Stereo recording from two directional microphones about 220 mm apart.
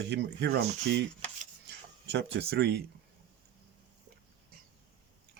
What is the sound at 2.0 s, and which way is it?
Speech, 50° right (ahead or behind).